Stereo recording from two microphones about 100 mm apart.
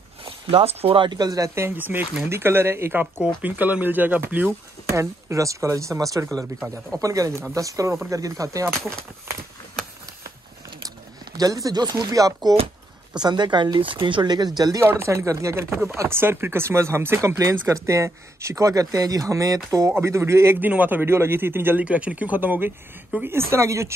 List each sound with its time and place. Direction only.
0.2 s speech: 65° right (ahead or behind)
1.1 s speech: 40° right (ahead or behind)
11.3 s speech: 35° right (ahead or behind)
14.8 s speech: 25° right (ahead or behind)